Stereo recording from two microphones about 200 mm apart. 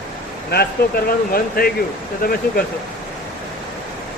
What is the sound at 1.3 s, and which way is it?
Speech, 50° left (ahead or behind).